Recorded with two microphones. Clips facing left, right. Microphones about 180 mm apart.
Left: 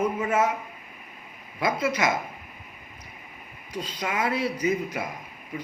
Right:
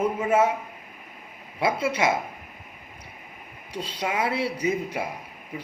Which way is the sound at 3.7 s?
30° right (ahead or behind).